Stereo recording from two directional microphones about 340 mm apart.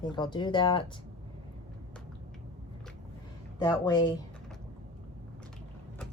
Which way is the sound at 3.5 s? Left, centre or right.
Centre.